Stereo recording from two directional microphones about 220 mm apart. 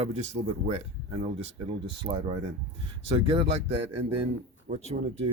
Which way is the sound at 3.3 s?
25° right (ahead or behind).